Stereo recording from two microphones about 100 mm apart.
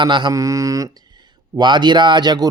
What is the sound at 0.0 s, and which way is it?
Speech, 50° right (ahead or behind).